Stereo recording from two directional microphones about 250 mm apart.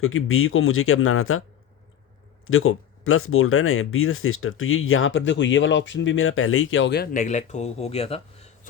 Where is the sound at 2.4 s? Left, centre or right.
Left.